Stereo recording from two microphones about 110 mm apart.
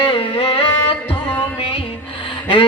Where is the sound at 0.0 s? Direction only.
55° left (ahead or behind).